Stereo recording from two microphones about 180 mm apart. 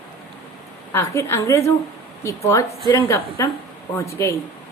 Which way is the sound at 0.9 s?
15° left (ahead or behind).